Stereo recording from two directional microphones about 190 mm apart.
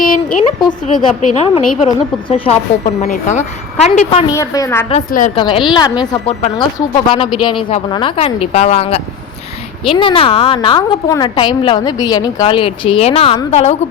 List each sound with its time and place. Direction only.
0.7 s a woman's voice: 40° left (ahead or behind)
4.3 s a woman's voice: 20° left (ahead or behind)
4.9 s a woman's voice: 40° left (ahead or behind)
5.4 s a woman's voice: 25° left (ahead or behind)